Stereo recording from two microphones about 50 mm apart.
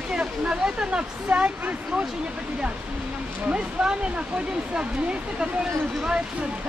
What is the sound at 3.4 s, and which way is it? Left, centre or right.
Speech, right.